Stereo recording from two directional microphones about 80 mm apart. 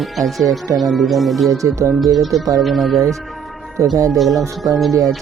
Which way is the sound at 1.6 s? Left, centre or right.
Right.